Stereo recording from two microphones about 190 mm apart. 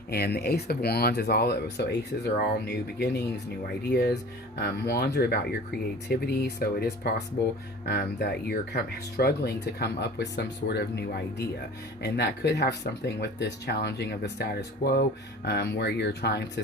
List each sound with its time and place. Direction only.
0.1 s speech: 55° left (ahead or behind)